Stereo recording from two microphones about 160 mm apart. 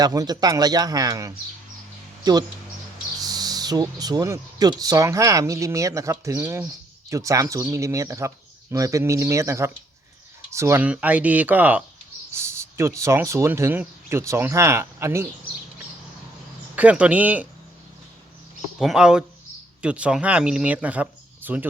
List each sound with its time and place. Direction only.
0.0 s speech: 25° right (ahead or behind)
16.7 s speech: 10° right (ahead or behind)
18.8 s speech: 5° right (ahead or behind)